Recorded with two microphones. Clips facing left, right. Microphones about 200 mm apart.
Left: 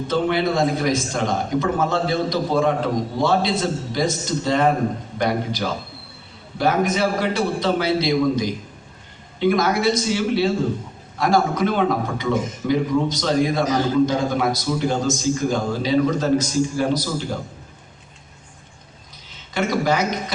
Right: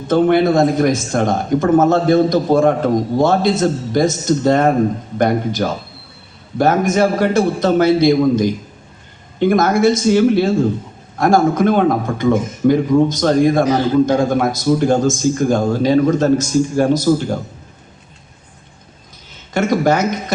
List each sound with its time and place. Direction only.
0.1 s speech: 50° right (ahead or behind)
19.5 s speech: 50° right (ahead or behind)